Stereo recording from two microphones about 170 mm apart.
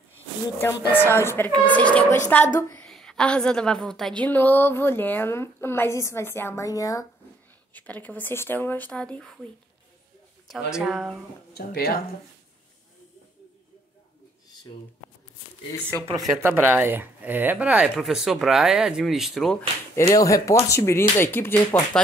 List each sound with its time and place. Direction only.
0.6 s a woman's voice: 15° left (ahead or behind)
7.7 s a woman's voice: 10° left (ahead or behind)
10.5 s speech: centre (ahead or behind)
11.5 s speech: 65° left (ahead or behind)
16.3 s speech: 15° right (ahead or behind)
20.0 s a woman's voice: 20° left (ahead or behind)